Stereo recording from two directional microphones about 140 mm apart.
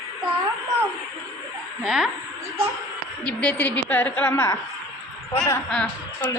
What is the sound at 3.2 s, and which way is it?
A woman's voice, 10° left (ahead or behind).